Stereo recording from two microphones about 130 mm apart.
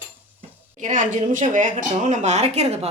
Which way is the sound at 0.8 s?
80° right.